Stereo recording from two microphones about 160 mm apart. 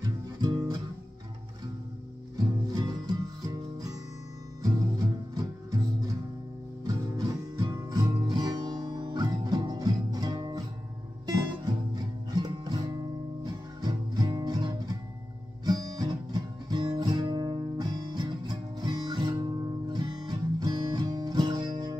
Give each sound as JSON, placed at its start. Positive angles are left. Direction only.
{"t": 0.0, "sound": "music", "side_deg": -25}
{"t": 2.7, "sound": "music", "side_deg": -25}
{"t": 4.9, "sound": "music", "side_deg": -25}
{"t": 6.8, "sound": "music", "side_deg": -25}